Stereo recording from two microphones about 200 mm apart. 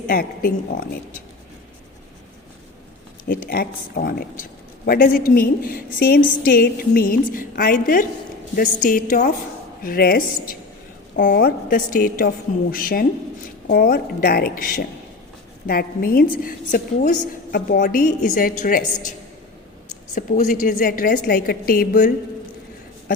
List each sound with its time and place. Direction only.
0.1 s a woman's voice: 45° left (ahead or behind)
3.2 s a woman's voice: 45° left (ahead or behind)
20.1 s a woman's voice: 40° left (ahead or behind)